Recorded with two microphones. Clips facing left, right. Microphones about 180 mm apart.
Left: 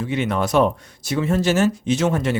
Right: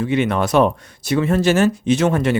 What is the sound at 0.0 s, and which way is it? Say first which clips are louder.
Speech: right 4 dB; 65° right (ahead or behind).